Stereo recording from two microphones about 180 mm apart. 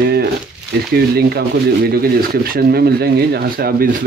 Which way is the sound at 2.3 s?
55° right (ahead or behind).